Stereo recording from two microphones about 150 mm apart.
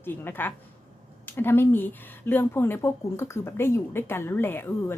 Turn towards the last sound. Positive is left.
turn(degrees=15)  # may be behind; listen again after turning